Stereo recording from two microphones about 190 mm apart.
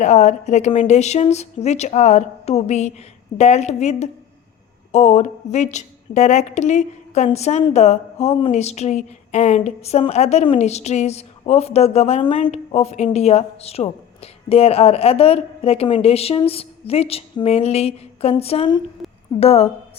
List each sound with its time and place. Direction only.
0.0 s a woman's voice: 40° left (ahead or behind)